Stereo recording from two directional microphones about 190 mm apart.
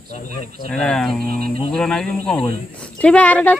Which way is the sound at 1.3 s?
35° left (ahead or behind).